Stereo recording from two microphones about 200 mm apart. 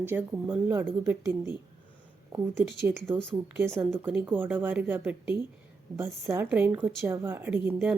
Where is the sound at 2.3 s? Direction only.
10° right (ahead or behind).